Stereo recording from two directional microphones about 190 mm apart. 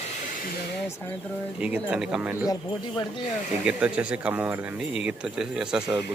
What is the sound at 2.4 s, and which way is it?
Speech, 20° left (ahead or behind).